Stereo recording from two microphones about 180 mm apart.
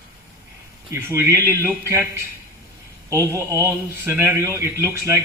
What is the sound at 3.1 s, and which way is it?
Speech, 15° right (ahead or behind).